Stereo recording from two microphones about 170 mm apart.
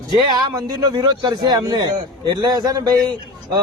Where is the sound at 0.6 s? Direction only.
25° right (ahead or behind).